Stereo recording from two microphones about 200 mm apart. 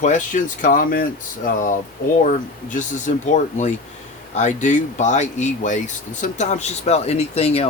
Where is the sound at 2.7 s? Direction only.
40° left (ahead or behind).